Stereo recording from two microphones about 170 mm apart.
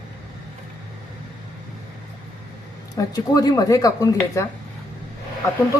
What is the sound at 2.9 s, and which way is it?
Speech, 20° left (ahead or behind).